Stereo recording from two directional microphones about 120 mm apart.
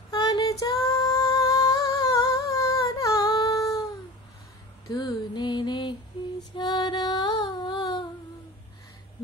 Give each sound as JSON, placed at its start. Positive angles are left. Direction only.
{"t": 0.1, "sound": "female singing", "side_deg": 30}
{"t": 4.8, "sound": "a sound", "side_deg": 35}
{"t": 6.2, "sound": "lullaby", "side_deg": 45}
{"t": 6.5, "sound": "female singing", "side_deg": 40}